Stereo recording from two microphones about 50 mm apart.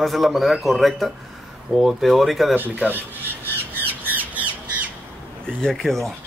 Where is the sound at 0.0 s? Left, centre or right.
Centre.